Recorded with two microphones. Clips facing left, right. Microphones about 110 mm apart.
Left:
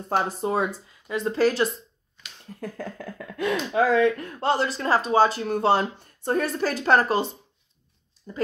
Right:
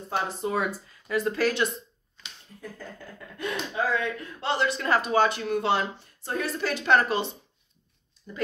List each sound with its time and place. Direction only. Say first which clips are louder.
0.4 s speech: left 3 dB; 30° left (ahead or behind)
2.6 s speech: left 7 dB; 90° left; by 7.2 s 40° left (ahead or behind)
8.3 s speech: left 4 dB; 35° left (ahead or behind)